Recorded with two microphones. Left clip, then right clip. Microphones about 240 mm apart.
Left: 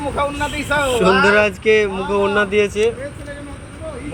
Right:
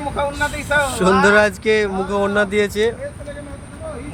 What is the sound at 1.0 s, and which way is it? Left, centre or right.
Speech, centre.